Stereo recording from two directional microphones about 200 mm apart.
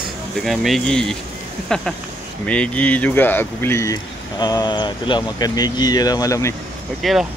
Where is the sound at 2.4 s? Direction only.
5° left (ahead or behind).